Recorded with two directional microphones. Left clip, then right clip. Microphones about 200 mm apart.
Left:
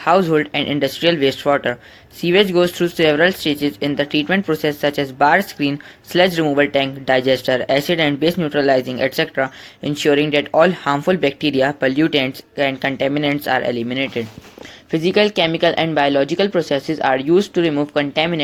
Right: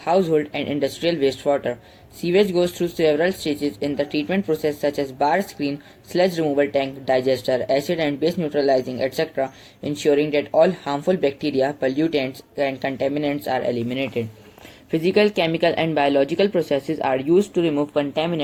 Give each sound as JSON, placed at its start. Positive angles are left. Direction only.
{"t": 0.0, "sound": "speech", "side_deg": 20}